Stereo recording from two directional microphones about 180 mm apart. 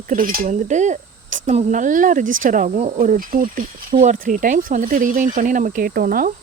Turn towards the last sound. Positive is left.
turn(degrees=-50)  # may be behind; listen again after turning